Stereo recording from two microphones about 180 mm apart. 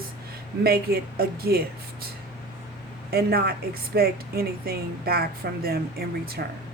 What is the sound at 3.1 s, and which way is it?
A woman's voice, 60° right (ahead or behind).